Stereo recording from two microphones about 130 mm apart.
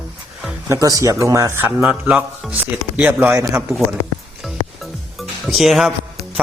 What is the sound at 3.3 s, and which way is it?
Speech, 25° right (ahead or behind).